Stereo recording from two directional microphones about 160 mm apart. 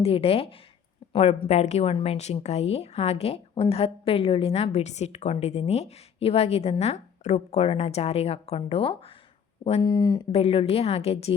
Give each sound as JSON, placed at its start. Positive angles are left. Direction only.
{"t": 0.0, "sound": "speech", "side_deg": 40}
{"t": 10.3, "sound": "speech", "side_deg": 40}